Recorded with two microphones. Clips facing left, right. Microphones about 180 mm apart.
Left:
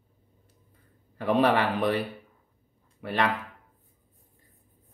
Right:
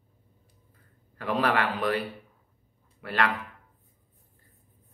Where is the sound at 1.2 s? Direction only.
25° left (ahead or behind).